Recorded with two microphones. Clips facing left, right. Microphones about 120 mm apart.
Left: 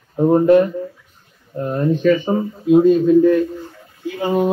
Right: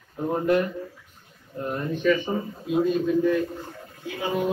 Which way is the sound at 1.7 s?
40° left (ahead or behind).